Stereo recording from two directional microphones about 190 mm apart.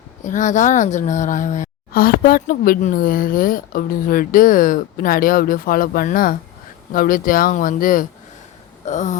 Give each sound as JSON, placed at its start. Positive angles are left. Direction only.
{"t": 0.3, "sound": "a woman's voice", "side_deg": 40}